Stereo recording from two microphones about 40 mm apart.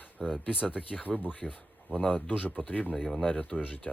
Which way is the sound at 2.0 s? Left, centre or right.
Left.